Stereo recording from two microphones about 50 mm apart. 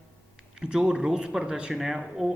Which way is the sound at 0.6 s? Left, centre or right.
Centre.